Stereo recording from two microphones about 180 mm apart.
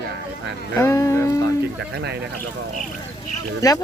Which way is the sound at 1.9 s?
70° right (ahead or behind).